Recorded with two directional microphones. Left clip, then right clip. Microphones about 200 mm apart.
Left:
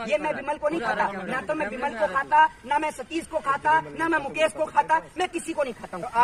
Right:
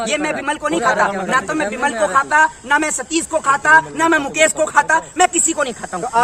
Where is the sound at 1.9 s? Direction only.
30° right (ahead or behind).